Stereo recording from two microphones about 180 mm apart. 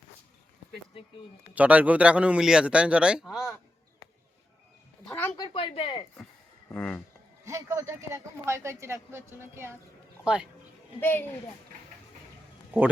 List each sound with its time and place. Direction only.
1.5 s a man's voice: 10° right (ahead or behind)
5.4 s speech: 25° left (ahead or behind)
6.7 s speech: 5° left (ahead or behind)
7.4 s a man's voice: 15° right (ahead or behind)
11.0 s speech: 10° left (ahead or behind)